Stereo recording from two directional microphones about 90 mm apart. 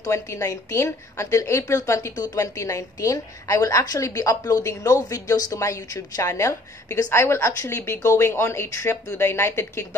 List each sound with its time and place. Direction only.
0.0 s a woman's voice: 35° left (ahead or behind)
2.1 s a woman's voice: 45° left (ahead or behind); by 9.8 s 30° left (ahead or behind)